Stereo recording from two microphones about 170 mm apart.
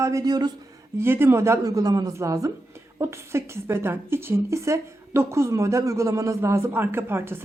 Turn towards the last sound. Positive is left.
turn(degrees=-15)  # may be behind; listen again after turning